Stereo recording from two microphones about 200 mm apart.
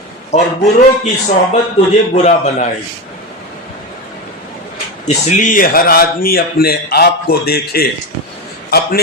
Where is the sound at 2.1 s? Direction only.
35° left (ahead or behind).